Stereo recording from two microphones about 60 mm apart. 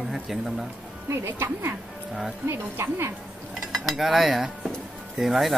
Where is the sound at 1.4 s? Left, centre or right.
Right.